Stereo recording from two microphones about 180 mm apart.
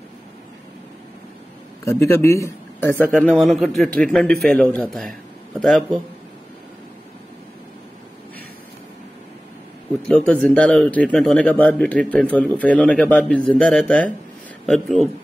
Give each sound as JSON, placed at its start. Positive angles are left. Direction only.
{"t": 1.9, "sound": "a man's voice", "side_deg": 15}
{"t": 3.3, "sound": "a man's voice", "side_deg": 0}
{"t": 10.0, "sound": "a man's voice", "side_deg": 5}